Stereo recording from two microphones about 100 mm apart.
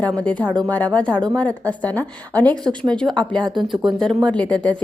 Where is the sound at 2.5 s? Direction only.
45° right (ahead or behind).